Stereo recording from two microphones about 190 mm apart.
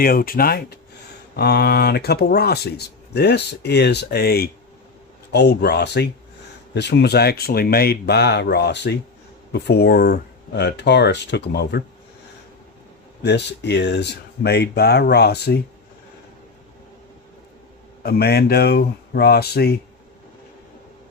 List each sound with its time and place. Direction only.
0.0 s speech: 50° left (ahead or behind)
13.2 s speech: 65° left (ahead or behind)
18.0 s speech: 55° left (ahead or behind)